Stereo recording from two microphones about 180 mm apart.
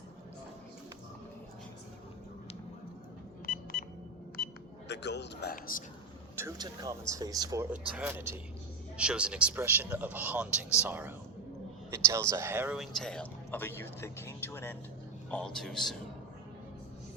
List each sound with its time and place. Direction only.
3.5 s telephone dialing: 45° left (ahead or behind)
4.9 s a man's voice: 70° left (ahead or behind); by 5.8 s 55° left (ahead or behind)
6.4 s speech: 20° right (ahead or behind)
11.9 s a sound: 15° right (ahead or behind)
12.3 s speech: 15° right (ahead or behind); by 16.0 s centre (ahead or behind)